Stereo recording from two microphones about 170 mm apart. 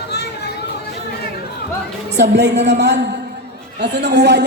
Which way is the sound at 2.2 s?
80° right.